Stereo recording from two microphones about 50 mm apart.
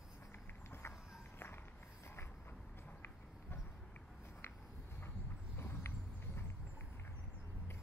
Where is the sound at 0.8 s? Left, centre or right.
Left.